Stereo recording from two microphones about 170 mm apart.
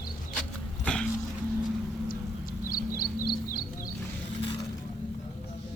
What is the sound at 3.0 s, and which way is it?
Music, 60° left (ahead or behind).